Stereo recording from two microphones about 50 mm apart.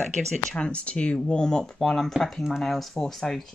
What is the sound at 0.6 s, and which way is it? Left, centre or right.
Speech, left.